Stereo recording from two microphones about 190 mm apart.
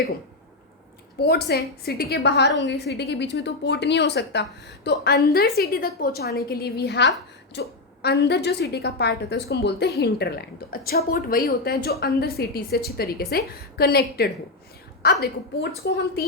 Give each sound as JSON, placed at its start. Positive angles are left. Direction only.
{"t": 1.2, "sound": "a woman's voice", "side_deg": 60}